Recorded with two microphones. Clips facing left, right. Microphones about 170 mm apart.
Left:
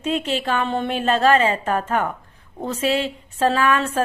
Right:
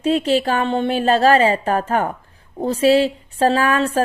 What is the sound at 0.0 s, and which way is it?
Speech, 35° right (ahead or behind).